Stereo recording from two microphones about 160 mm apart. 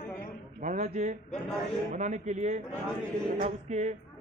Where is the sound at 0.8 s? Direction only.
55° right (ahead or behind).